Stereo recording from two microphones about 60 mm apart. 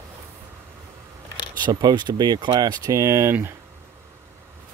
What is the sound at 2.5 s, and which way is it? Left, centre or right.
Speech, right.